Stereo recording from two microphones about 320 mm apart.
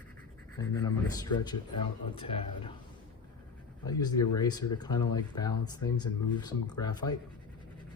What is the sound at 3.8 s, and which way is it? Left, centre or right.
Speech, centre.